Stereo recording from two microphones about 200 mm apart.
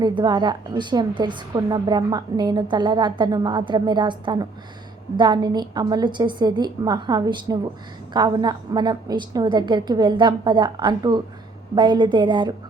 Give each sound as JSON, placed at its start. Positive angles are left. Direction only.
{"t": 0.0, "sound": "a woman's voice", "side_deg": -20}